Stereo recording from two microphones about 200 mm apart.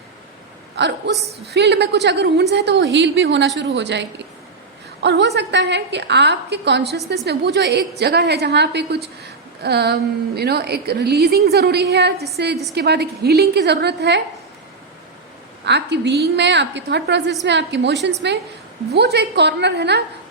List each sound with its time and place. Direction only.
0.8 s a woman's voice: 60° right (ahead or behind)
15.6 s a woman's voice: 60° right (ahead or behind)